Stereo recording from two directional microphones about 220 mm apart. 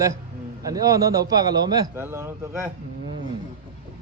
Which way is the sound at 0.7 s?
15° right (ahead or behind).